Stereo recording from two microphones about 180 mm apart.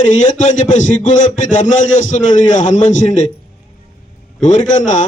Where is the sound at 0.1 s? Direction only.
45° left (ahead or behind).